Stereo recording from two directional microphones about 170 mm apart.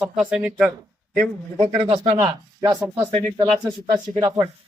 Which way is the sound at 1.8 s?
30° right (ahead or behind).